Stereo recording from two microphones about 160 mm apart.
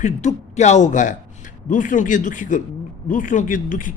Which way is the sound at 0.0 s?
50° left (ahead or behind).